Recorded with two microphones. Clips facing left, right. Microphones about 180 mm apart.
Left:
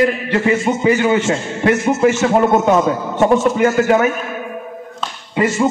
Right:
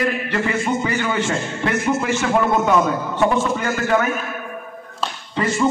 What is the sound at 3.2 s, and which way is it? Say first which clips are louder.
Speech: left 7 dB; 20° left (ahead or behind).